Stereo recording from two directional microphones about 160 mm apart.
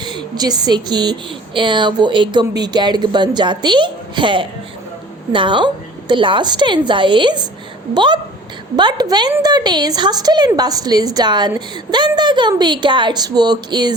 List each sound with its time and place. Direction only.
0.0 s a woman's voice: 30° right (ahead or behind)